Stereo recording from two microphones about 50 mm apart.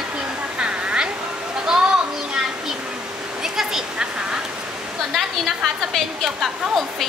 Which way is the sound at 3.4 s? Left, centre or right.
Centre.